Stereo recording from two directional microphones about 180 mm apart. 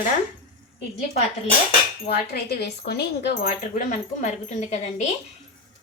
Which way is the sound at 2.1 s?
60° left (ahead or behind).